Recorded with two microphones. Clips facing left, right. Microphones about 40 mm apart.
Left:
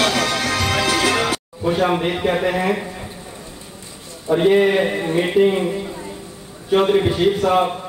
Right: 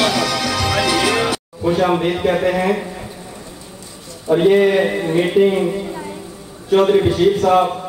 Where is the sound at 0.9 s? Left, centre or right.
Right.